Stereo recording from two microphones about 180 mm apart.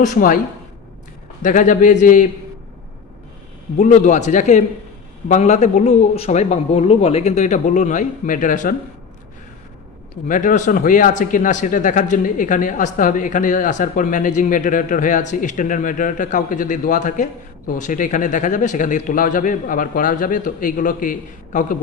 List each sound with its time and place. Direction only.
0.0 s speech: 50° left (ahead or behind)
1.4 s speech: 45° left (ahead or behind)
3.8 s a man's voice: 40° left (ahead or behind)
10.2 s speech: 45° left (ahead or behind)